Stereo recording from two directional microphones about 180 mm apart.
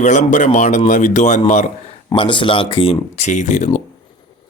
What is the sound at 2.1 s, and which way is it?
A man's voice, 25° left (ahead or behind).